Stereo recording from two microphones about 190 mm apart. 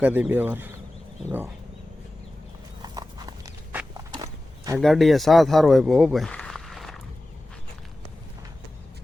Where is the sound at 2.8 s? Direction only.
20° right (ahead or behind).